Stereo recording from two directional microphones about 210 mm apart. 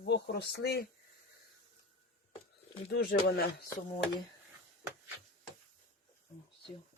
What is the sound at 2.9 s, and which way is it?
Speech, 45° left (ahead or behind).